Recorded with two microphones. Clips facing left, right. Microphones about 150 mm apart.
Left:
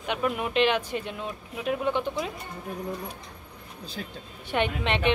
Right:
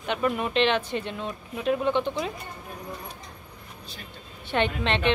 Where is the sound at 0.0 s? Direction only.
10° left (ahead or behind).